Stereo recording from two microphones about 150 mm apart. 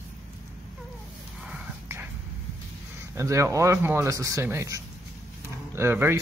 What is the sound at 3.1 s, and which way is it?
A man's voice, 20° right (ahead or behind).